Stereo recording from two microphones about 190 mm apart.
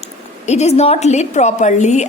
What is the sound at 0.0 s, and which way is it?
A woman's voice, 35° left (ahead or behind).